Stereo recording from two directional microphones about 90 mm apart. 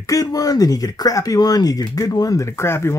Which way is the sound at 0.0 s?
40° left (ahead or behind).